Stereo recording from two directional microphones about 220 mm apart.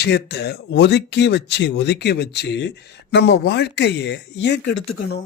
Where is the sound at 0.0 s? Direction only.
50° left (ahead or behind).